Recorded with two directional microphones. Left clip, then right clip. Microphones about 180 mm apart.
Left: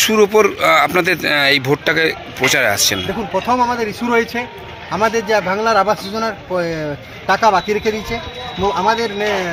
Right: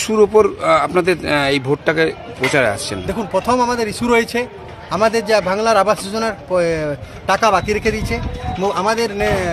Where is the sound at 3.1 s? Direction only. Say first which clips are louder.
Even; 35° right (ahead or behind).